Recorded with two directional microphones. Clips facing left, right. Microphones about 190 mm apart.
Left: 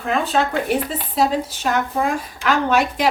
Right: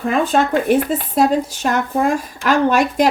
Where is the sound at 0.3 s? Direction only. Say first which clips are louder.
Right 4 dB; 50° right (ahead or behind).